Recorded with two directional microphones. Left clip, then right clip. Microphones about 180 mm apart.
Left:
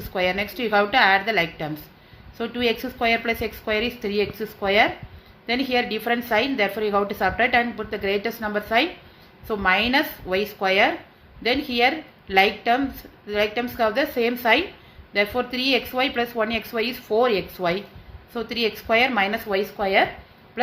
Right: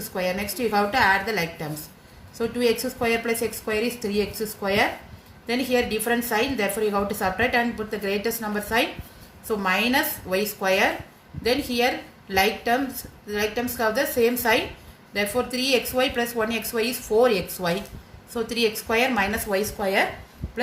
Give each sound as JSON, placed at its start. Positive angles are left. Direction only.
{"t": 0.1, "sound": "a woman's voice", "side_deg": 45}